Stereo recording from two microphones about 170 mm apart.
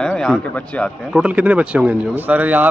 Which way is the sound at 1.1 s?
5° right (ahead or behind).